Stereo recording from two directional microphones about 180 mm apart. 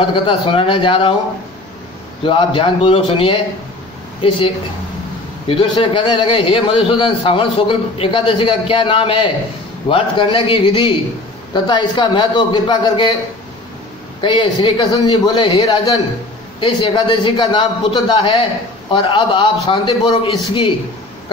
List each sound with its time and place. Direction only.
0.0 s a man's voice: 30° left (ahead or behind)
2.2 s a man's voice: 30° left (ahead or behind)
5.5 s a man's voice: 30° left (ahead or behind)
14.2 s a man's voice: 30° left (ahead or behind)